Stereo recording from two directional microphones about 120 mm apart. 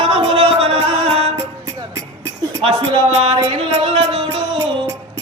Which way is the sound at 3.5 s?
50° right (ahead or behind).